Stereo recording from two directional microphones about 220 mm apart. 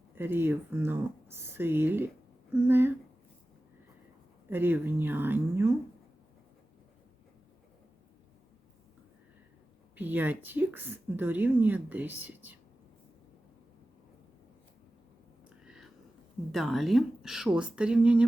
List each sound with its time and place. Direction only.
0.2 s a woman's voice: 10° right (ahead or behind)
4.4 s a woman's voice: 10° right (ahead or behind)
9.9 s a woman's voice: 10° right (ahead or behind)
15.4 s a sound: 5° right (ahead or behind)
16.5 s a woman's voice: centre (ahead or behind)